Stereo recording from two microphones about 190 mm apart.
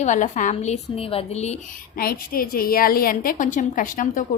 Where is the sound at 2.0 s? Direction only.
50° left (ahead or behind).